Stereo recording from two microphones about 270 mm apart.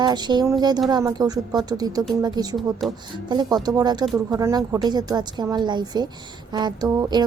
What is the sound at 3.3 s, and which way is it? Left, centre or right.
A woman's voice, centre.